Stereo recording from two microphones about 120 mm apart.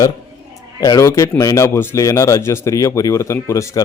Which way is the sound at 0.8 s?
30° left (ahead or behind).